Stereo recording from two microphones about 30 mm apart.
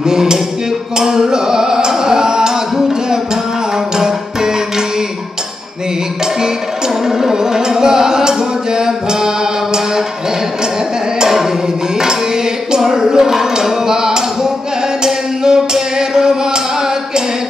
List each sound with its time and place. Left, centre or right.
0.0 s music: centre
7.1 s music: centre
11.1 s music: centre
12.7 s a sound: right
15.0 s music: right